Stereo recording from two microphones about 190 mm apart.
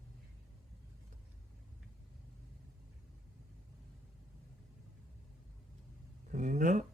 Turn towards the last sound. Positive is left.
turn(degrees=-40)  # may be behind; listen again after turning